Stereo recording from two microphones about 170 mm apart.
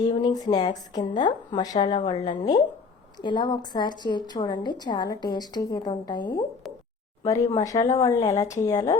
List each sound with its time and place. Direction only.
0.1 s a woman's voice: 25° left (ahead or behind)
7.5 s a woman's voice: 20° left (ahead or behind)